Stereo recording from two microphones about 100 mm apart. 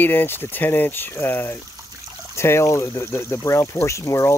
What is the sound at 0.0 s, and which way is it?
Speech, 20° left (ahead or behind).